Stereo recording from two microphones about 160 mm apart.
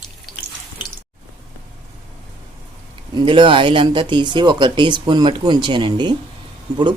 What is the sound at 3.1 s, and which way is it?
Speech, 30° right (ahead or behind).